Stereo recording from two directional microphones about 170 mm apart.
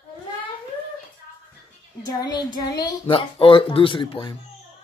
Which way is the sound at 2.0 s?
25° left (ahead or behind).